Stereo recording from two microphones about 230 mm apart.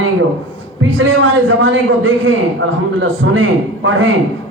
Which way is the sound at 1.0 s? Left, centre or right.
Right.